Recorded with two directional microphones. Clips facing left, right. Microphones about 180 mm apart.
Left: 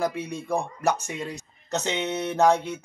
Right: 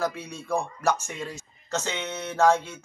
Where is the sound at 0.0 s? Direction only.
15° left (ahead or behind).